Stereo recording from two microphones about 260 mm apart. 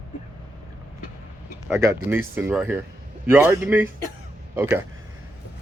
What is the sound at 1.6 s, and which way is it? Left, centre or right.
Speech, centre.